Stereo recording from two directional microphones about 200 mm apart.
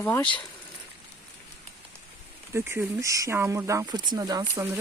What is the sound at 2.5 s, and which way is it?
Speech, 10° right (ahead or behind).